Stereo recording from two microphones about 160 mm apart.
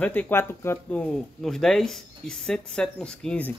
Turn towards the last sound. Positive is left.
turn(degrees=5)  # may be behind; listen again after turning